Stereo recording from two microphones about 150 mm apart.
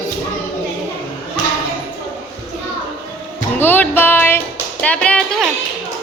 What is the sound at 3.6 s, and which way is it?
Music, 15° left (ahead or behind).